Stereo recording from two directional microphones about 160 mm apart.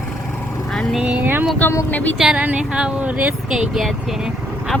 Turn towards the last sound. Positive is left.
turn(degrees=-5)  # may be behind; listen again after turning